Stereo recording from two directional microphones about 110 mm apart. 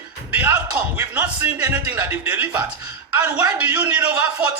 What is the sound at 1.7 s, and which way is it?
A man's voice, 20° right (ahead or behind).